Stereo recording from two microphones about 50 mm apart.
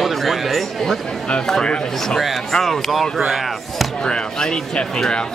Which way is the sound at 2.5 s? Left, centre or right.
Centre.